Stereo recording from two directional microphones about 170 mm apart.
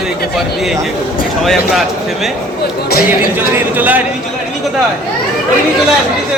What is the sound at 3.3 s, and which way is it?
Speech, 10° right (ahead or behind).